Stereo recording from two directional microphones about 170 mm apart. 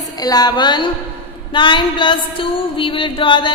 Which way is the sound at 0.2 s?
20° left (ahead or behind).